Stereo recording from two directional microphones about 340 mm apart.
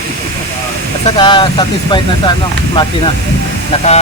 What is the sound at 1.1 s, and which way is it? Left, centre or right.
A man's voice, centre.